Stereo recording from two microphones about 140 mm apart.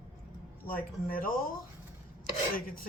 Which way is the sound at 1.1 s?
85° left.